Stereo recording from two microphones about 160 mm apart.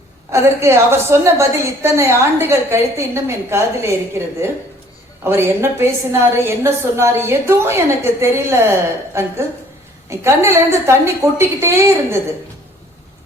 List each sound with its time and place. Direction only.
0.3 s a woman's voice: 15° right (ahead or behind)